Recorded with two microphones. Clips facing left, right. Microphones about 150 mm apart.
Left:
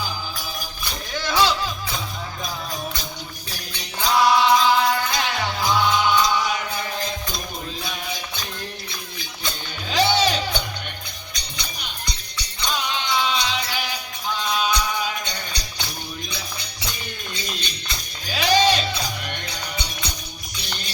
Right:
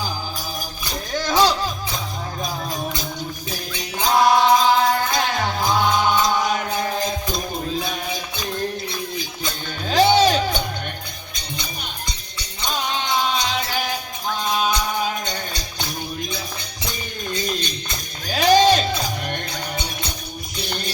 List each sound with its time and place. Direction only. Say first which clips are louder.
1.1 s a sound: right 3 dB; 45° right (ahead or behind)
4.0 s music: right 2 dB; 45° right (ahead or behind)
10.2 s music: right 5 dB; 45° right (ahead or behind)
12.6 s music: right 2 dB; 45° right (ahead or behind)
17.3 s music: right 9 dB; 45° right (ahead or behind)